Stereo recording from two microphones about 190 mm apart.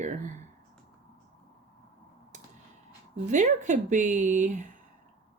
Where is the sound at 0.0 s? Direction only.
40° right (ahead or behind).